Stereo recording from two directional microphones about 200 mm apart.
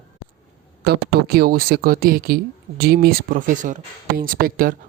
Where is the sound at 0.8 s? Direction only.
50° right (ahead or behind).